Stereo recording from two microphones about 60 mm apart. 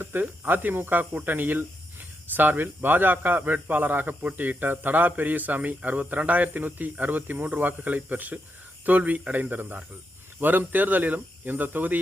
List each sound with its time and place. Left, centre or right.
0.0 s speech: right